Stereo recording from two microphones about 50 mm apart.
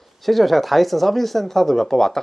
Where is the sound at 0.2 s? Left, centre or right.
Centre.